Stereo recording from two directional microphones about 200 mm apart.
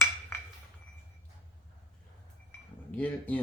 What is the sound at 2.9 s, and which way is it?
Speech, 10° left (ahead or behind).